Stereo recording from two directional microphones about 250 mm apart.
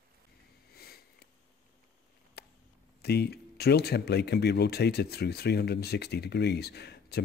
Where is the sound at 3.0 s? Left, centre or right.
Left.